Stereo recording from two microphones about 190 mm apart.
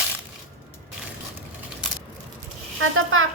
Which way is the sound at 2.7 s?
90° right.